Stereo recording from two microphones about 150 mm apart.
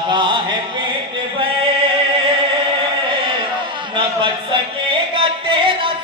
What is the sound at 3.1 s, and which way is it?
Chant, 35° right (ahead or behind).